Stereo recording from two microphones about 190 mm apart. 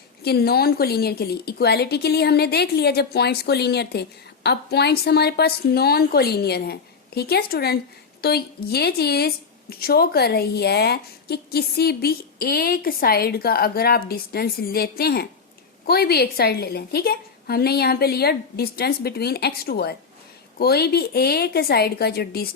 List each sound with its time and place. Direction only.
0.2 s a woman's voice: 55° left (ahead or behind)